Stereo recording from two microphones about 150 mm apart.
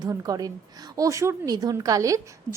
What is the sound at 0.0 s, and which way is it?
A woman's voice, 25° right (ahead or behind).